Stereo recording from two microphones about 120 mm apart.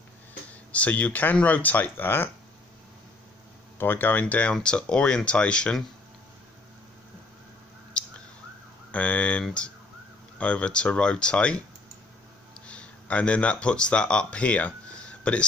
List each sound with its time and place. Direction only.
0.7 s speech: 10° left (ahead or behind)
3.7 s speech: 15° left (ahead or behind)
8.0 s a sound: 10° left (ahead or behind)
8.9 s speech: 10° left (ahead or behind)
12.6 s speech: 10° left (ahead or behind)